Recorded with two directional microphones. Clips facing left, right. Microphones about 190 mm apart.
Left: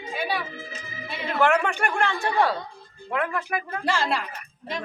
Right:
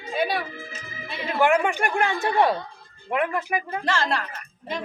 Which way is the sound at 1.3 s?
15° right (ahead or behind).